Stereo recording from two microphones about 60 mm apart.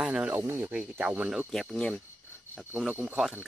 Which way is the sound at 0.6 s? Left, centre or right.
Centre.